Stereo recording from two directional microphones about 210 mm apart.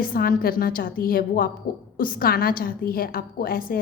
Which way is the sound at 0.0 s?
45° left (ahead or behind).